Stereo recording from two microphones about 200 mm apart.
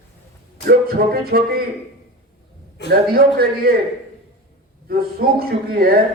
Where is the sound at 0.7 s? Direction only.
50° right (ahead or behind).